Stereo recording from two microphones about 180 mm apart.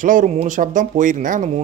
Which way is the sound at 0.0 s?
45° right (ahead or behind).